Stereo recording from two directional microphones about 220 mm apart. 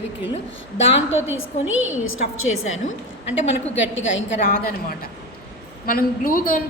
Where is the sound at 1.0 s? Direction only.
60° left (ahead or behind).